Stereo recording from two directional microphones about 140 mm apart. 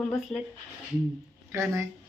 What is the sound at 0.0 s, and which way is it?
Speech, 5° left (ahead or behind).